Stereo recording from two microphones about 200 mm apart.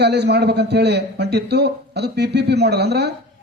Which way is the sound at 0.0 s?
55° right (ahead or behind).